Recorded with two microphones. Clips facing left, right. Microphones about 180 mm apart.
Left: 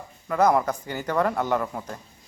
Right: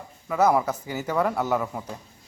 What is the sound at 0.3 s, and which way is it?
Speech, 5° right (ahead or behind).